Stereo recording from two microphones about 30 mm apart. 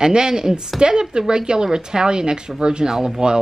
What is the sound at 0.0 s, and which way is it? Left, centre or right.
Speech, right.